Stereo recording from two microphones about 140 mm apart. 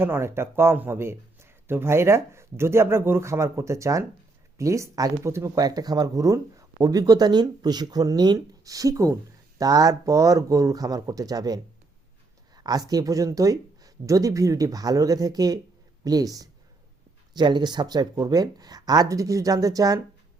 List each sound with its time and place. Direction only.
0.0 s speech: 15° right (ahead or behind)